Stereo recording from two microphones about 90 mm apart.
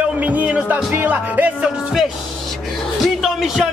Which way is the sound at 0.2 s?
15° right (ahead or behind).